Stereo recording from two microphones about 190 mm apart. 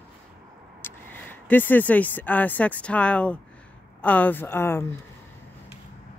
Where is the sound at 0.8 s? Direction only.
10° left (ahead or behind).